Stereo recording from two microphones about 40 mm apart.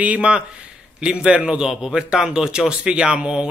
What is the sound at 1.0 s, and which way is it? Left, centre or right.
A man's voice, right.